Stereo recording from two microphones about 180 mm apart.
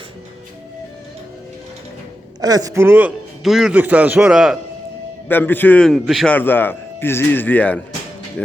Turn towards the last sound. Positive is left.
turn(degrees=10)  # may be behind; listen again after turning